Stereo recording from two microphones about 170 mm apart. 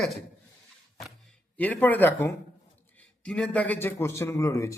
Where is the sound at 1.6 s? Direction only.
10° left (ahead or behind).